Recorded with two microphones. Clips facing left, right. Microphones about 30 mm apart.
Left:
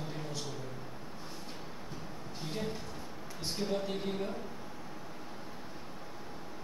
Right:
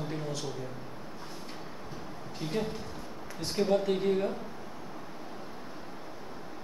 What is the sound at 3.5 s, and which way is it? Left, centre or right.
Speech, centre.